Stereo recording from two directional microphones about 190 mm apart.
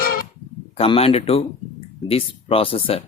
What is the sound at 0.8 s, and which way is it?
Speech, 30° left (ahead or behind).